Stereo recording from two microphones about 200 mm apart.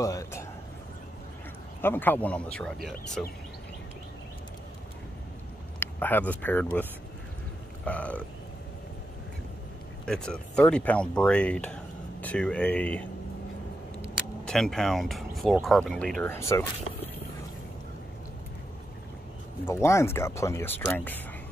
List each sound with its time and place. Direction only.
0.0 s speech: 15° left (ahead or behind)
1.8 s speech: 10° left (ahead or behind)
5.8 s speech: 10° left (ahead or behind)
10.0 s speech: 5° left (ahead or behind)
14.4 s speech: 5° left (ahead or behind)
19.6 s speech: 15° left (ahead or behind)